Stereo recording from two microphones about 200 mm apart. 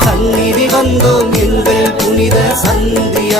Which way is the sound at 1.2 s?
Centre (ahead or behind).